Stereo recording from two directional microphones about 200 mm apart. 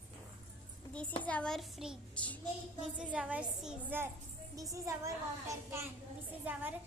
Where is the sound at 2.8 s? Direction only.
5° right (ahead or behind).